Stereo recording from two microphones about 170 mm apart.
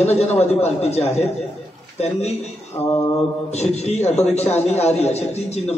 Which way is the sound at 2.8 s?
15° left (ahead or behind).